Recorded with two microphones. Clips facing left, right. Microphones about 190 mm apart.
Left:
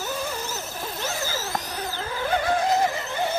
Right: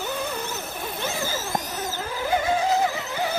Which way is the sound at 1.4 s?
50° right (ahead or behind).